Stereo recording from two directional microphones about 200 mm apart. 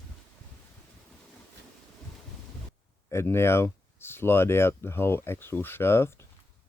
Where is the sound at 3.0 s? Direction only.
10° left (ahead or behind).